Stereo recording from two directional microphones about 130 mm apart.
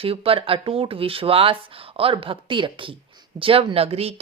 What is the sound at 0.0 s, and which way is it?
Speech, 45° right (ahead or behind).